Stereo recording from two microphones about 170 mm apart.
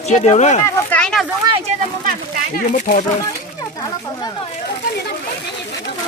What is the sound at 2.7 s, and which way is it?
Speech, 45° left (ahead or behind).